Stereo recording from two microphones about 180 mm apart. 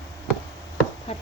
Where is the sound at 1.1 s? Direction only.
35° left (ahead or behind).